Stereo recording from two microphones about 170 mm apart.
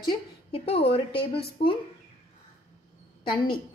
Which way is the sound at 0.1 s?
35° left (ahead or behind).